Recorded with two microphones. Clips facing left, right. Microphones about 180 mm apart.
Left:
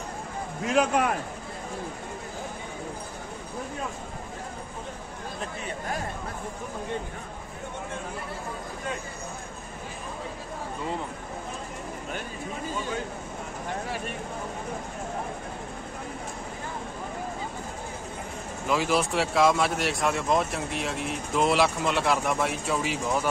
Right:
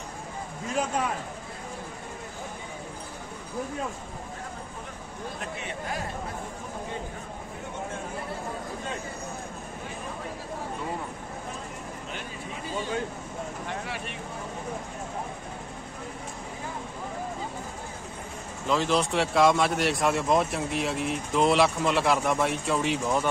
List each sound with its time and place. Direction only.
0.7 s a man's voice: 70° left (ahead or behind)
18.7 s speech: 5° left (ahead or behind)